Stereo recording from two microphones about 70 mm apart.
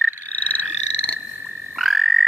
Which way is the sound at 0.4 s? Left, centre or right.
Left.